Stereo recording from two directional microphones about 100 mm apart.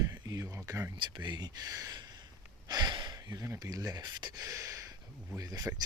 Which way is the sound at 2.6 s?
40° right (ahead or behind).